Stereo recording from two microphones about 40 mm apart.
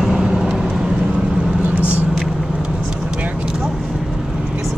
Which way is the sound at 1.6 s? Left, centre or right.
Right.